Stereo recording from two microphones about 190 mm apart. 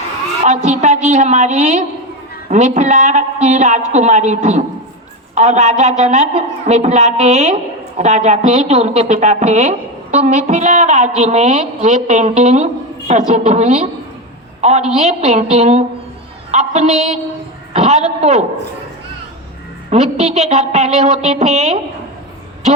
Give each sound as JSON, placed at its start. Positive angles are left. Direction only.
{"t": 0.4, "sound": "a woman's voice", "side_deg": -40}
{"t": 19.9, "sound": "a woman's voice", "side_deg": -35}